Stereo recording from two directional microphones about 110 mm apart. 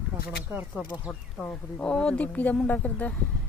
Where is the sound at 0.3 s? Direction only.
15° right (ahead or behind).